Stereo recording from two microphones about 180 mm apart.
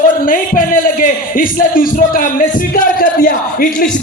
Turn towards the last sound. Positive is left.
turn(degrees=50)  # may be behind; listen again after turning